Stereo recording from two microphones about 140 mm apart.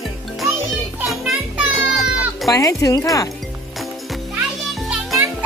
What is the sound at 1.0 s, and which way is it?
Music, centre (ahead or behind).